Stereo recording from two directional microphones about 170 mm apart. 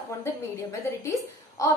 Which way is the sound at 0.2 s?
15° left (ahead or behind).